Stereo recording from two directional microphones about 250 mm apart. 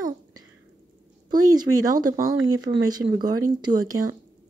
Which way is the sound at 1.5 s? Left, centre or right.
Centre.